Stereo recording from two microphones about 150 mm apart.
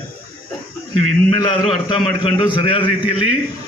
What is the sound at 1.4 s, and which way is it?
A man's voice, 30° left (ahead or behind).